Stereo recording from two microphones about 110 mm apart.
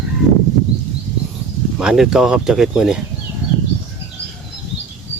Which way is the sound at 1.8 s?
5° right (ahead or behind).